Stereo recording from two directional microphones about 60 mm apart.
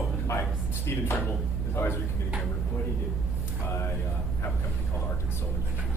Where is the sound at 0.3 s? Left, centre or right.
Left.